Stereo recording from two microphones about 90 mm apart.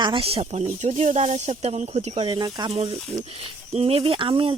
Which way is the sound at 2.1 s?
90° right.